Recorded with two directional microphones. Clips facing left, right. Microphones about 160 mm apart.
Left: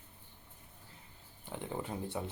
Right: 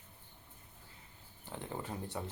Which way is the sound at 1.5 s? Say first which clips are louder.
Left 2 dB; 15° left (ahead or behind).